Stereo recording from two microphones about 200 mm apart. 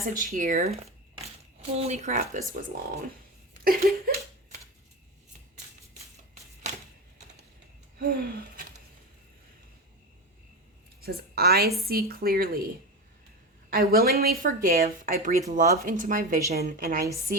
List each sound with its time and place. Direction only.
0.0 s speech: 45° right (ahead or behind)
3.5 s a sound: 50° right (ahead or behind)
7.9 s gasp: 50° right (ahead or behind)
11.0 s a woman's voice: 50° right (ahead or behind)
13.7 s speech: 50° right (ahead or behind)